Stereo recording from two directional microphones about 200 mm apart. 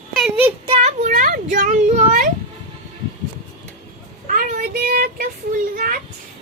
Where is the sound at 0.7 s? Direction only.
30° right (ahead or behind).